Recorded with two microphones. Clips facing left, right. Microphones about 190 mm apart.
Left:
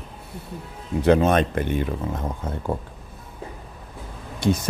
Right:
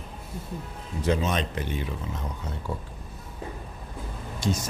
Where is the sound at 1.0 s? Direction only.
60° left (ahead or behind).